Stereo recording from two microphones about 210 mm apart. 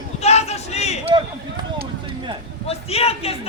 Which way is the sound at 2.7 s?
30° left (ahead or behind).